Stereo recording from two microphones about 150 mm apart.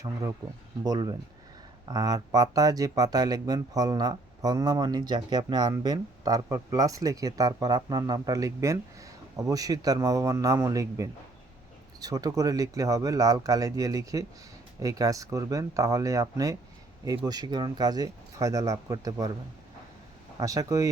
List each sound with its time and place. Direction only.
0.0 s speech: 20° right (ahead or behind)
20.4 s speech: 20° right (ahead or behind)